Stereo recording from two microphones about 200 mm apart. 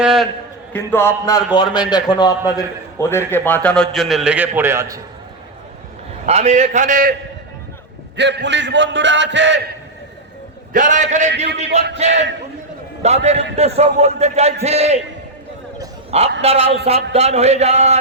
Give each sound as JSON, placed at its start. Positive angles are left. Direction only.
{"t": 0.0, "sound": "a man's voice", "side_deg": -5}
{"t": 0.7, "sound": "a man's voice", "side_deg": 10}
{"t": 6.2, "sound": "a man's voice", "side_deg": -30}
{"t": 8.1, "sound": "a man's voice", "side_deg": -60}
{"t": 10.7, "sound": "a man's voice", "side_deg": -40}
{"t": 16.4, "sound": "a man's voice", "side_deg": -30}